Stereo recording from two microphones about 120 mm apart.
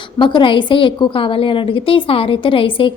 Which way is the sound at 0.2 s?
45° left (ahead or behind).